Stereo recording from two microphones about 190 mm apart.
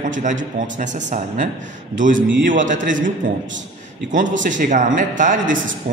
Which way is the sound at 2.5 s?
40° right (ahead or behind).